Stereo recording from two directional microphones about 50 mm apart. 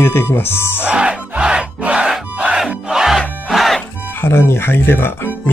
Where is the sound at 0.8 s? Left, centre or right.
Right.